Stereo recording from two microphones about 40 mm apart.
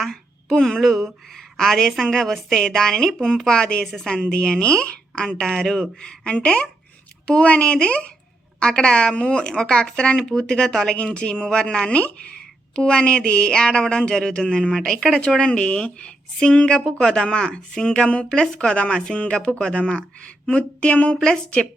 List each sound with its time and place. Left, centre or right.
0.0 s a sound: centre
0.5 s a woman's voice: centre
0.8 s a sound: centre
2.0 s a woman's voice: centre
15.4 s speech: left
17.0 s a woman's voice: centre
17.2 s speech: left
18.7 s speech: left